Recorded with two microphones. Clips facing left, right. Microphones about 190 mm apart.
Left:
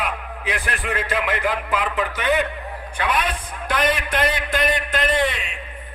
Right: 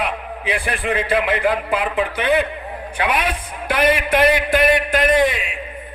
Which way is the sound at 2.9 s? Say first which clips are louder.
Right 2 dB; 10° right (ahead or behind).